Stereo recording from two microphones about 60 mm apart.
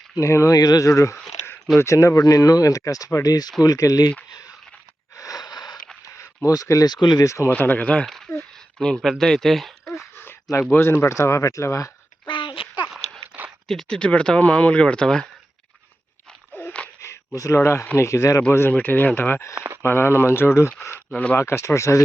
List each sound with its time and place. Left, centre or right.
0.2 s speech: left
0.5 s speech: left
3.6 s speech: left
5.1 s a sound: left
6.1 s speech: left
7.5 s speech: left
8.4 s speech: centre
10.6 s speech: left
13.3 s a sound: centre
13.7 s speech: centre
16.5 s a sound: left
17.0 s speech: left
18.7 s speech: left